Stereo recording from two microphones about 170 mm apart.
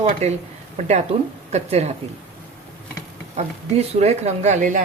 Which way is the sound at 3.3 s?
40° right (ahead or behind).